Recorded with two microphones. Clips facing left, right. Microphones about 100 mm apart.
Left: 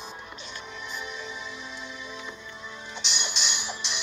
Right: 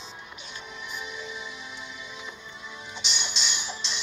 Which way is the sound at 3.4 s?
15° left (ahead or behind).